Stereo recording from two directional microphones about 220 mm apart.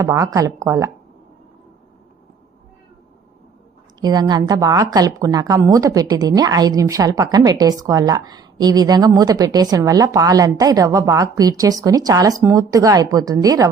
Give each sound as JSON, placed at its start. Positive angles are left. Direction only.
{"t": 0.0, "sound": "a woman's voice", "side_deg": -15}
{"t": 4.0, "sound": "a woman's voice", "side_deg": -20}